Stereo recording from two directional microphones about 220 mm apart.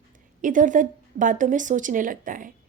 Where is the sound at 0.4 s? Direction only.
35° right (ahead or behind).